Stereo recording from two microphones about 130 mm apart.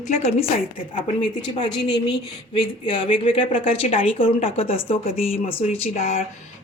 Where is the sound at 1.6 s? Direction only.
35° left (ahead or behind); by 6.3 s 55° left (ahead or behind).